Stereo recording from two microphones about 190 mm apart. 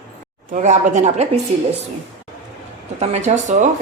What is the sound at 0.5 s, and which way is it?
Speech, 40° right (ahead or behind).